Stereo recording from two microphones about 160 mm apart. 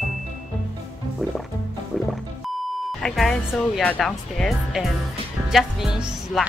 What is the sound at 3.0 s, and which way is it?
Speech, centre (ahead or behind).